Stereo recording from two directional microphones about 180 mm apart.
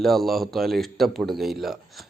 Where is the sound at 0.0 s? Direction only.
Centre (ahead or behind).